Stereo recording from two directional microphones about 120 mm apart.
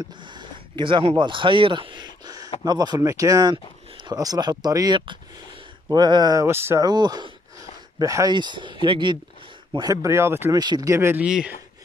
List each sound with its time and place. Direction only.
0.2 s speech: 40° right (ahead or behind)
6.4 s speech: 20° right (ahead or behind)
6.9 s speech: 35° right (ahead or behind)
10.5 s speech: 35° right (ahead or behind)
11.2 s speech: 5° right (ahead or behind)